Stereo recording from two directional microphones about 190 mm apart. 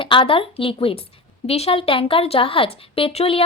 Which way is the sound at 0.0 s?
25° left (ahead or behind).